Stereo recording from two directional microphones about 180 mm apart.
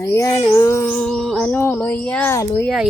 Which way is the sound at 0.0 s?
15° left (ahead or behind).